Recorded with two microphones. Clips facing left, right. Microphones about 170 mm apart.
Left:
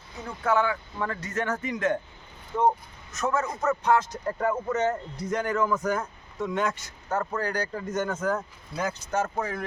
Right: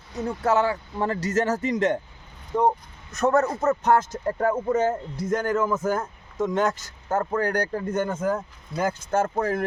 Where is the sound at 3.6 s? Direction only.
45° right (ahead or behind).